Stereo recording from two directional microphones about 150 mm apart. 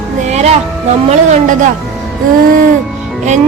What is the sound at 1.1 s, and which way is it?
Music, 50° right (ahead or behind).